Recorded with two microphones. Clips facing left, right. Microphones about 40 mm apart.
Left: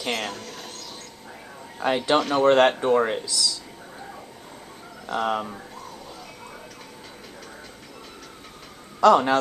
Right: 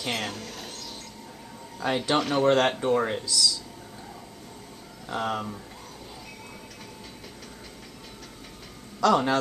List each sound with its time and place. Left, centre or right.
0.0 s a sound: centre
2.0 s speech: centre
5.0 s speech: centre
9.0 s speech: centre